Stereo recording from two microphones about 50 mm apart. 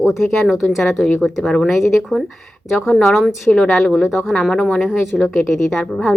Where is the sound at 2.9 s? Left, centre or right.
Centre.